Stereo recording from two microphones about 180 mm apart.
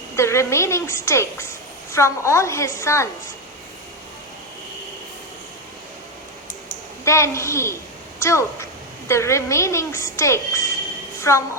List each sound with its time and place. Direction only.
0.2 s a woman's voice: 15° left (ahead or behind)
7.0 s a woman's voice: 15° left (ahead or behind)